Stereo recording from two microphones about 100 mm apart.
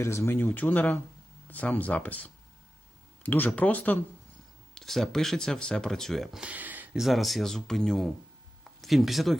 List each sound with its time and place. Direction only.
0.0 s speech: 30° left (ahead or behind)
4.7 s speech: 5° left (ahead or behind)
6.4 s a sound: 15° right (ahead or behind)
6.9 s speech: centre (ahead or behind)